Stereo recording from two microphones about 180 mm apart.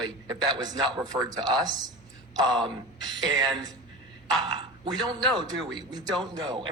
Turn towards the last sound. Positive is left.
turn(degrees=-25)  # may be behind; listen again after turning